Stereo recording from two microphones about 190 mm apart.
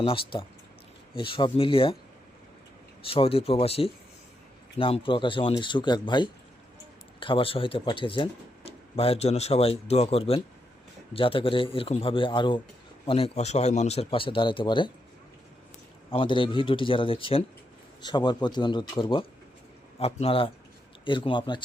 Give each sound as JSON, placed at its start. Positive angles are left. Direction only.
{"t": 0.0, "sound": "a man's voice", "side_deg": 30}
{"t": 3.0, "sound": "a man's voice", "side_deg": 30}
{"t": 16.1, "sound": "a man's voice", "side_deg": 25}